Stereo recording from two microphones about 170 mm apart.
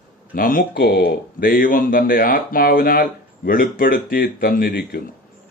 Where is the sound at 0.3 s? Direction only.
55° left (ahead or behind).